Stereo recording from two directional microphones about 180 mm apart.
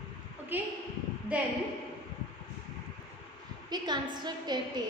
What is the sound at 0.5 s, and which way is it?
Speech, 10° right (ahead or behind).